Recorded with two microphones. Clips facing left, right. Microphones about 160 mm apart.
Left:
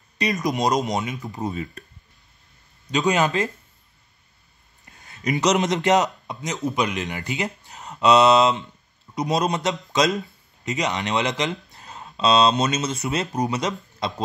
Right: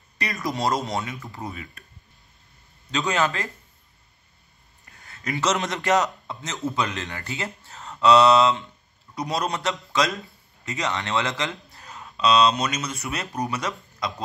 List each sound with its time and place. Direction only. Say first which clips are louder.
0.2 s a man's voice: left 4 dB; 20° left (ahead or behind)
2.9 s speech: left 4 dB; 15° left (ahead or behind)
5.0 s a man's voice: left 4 dB; 20° left (ahead or behind)